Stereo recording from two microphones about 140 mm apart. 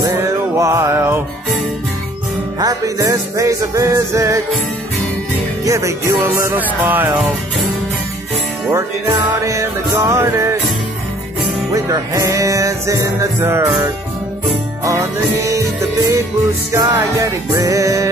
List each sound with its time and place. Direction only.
0.0 s music: 20° right (ahead or behind)
2.6 s music: 25° right (ahead or behind)
5.7 s music: 20° right (ahead or behind)
9.3 s music: 20° right (ahead or behind)
11.7 s music: 25° right (ahead or behind)
16.7 s music: 25° right (ahead or behind)